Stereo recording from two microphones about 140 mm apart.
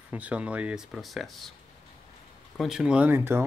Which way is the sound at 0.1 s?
10° right (ahead or behind).